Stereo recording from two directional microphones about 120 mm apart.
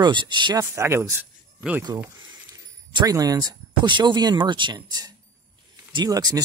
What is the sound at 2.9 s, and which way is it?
Speech, 30° right (ahead or behind).